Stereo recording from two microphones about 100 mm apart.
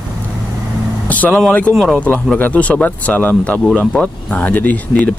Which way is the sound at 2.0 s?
15° left (ahead or behind).